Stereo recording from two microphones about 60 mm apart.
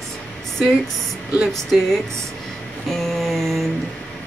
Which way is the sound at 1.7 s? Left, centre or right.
Centre.